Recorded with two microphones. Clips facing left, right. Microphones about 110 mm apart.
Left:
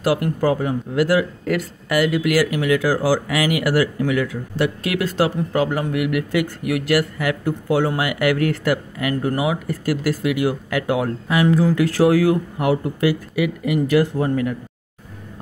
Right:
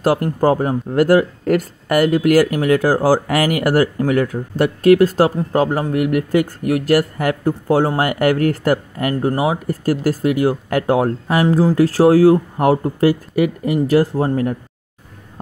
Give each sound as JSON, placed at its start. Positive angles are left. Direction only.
{"t": 0.0, "sound": "speech", "side_deg": -40}